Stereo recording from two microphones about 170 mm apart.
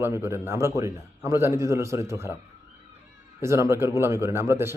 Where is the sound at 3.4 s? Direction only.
15° right (ahead or behind).